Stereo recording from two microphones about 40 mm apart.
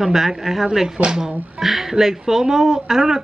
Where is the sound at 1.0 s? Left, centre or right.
Right.